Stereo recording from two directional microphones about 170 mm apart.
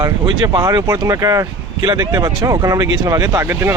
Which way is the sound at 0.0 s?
25° right (ahead or behind).